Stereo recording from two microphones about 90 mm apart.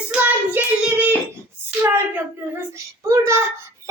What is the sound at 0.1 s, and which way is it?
Child singing, 15° right (ahead or behind).